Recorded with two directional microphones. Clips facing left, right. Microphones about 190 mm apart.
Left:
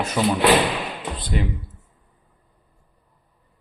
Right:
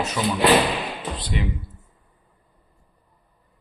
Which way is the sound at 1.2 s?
50° left (ahead or behind).